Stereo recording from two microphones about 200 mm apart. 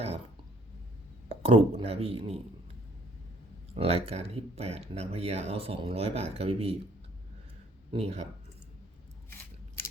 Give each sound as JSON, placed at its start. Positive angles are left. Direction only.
{"t": 1.3, "sound": "speech", "side_deg": -30}
{"t": 3.8, "sound": "speech", "side_deg": -30}
{"t": 7.9, "sound": "speech", "side_deg": -30}